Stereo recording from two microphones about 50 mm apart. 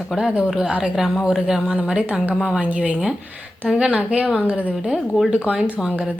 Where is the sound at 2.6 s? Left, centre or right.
Right.